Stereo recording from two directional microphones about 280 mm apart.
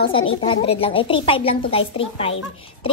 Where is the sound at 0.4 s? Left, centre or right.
Centre.